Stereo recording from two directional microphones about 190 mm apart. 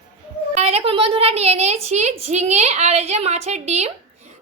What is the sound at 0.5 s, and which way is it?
A woman's voice, 35° right (ahead or behind).